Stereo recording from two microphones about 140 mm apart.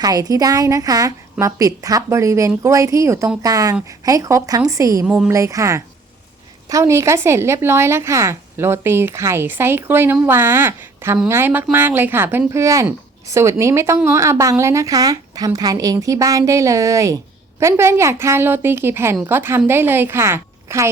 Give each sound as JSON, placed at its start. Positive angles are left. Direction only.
{"t": 0.0, "sound": "speech", "side_deg": -25}
{"t": 5.0, "sound": "speech", "side_deg": -10}
{"t": 5.3, "sound": "speech", "side_deg": -25}